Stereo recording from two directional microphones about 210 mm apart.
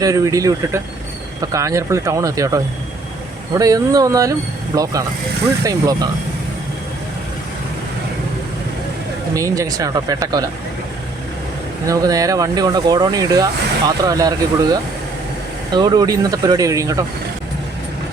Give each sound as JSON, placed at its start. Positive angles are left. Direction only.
{"t": 0.0, "sound": "speech", "side_deg": -15}
{"t": 9.3, "sound": "speech", "side_deg": -15}
{"t": 11.9, "sound": "speech", "side_deg": -15}